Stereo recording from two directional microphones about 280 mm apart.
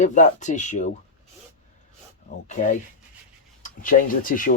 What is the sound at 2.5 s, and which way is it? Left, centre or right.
Speech, left.